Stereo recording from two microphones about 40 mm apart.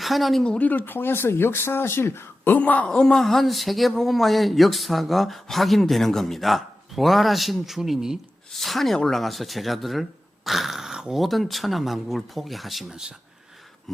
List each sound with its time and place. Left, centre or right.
0.0 s speech: centre
0.6 s speech: left
2.6 s a man's voice: left
2.9 s speech: centre
8.5 s speech: centre
10.9 s a sound: centre
11.2 s speech: centre
12.9 s speech: centre